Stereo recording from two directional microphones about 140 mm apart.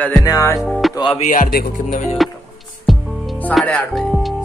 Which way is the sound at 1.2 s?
70° left (ahead or behind).